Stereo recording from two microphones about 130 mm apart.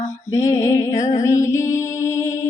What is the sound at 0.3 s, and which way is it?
Music, 25° left (ahead or behind).